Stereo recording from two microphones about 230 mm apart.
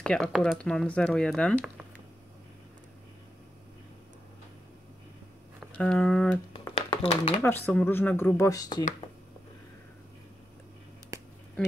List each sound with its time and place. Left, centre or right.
0.0 s speech: centre
5.6 s speech: centre
7.0 s speech: left
7.4 s speech: centre